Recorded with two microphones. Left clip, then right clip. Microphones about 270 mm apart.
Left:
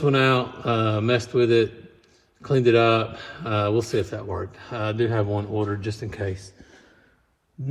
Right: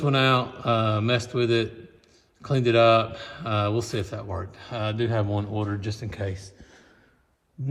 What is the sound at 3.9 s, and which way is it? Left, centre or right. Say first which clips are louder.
Speech: left 5 dB; right.